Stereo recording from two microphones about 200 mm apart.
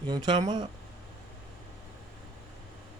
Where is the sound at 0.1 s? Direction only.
20° right (ahead or behind).